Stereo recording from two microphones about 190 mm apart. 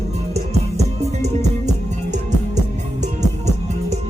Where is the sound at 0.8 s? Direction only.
35° right (ahead or behind).